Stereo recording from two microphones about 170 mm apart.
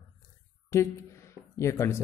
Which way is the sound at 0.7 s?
15° left (ahead or behind).